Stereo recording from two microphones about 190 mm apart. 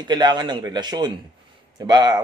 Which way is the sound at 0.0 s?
20° right (ahead or behind).